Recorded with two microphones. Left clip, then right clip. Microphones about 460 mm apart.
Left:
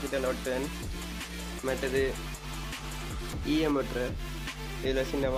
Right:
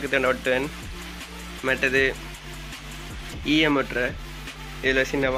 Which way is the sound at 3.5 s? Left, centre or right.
Left.